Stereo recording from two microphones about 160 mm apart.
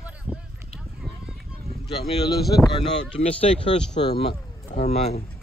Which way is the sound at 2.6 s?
35° left (ahead or behind).